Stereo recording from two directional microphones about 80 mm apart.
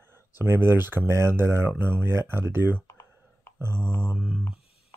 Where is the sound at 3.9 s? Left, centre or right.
Centre.